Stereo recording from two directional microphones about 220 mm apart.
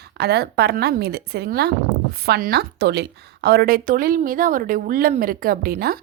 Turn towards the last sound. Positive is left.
turn(degrees=-40)  # may be behind; listen again after turning